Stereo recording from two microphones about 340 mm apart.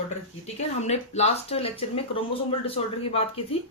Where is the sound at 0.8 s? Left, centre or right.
Centre.